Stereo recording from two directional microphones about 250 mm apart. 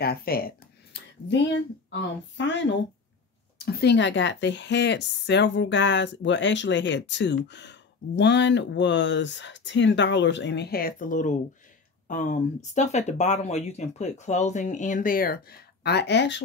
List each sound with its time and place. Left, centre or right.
0.0 s speech: left
2.3 s a woman's voice: left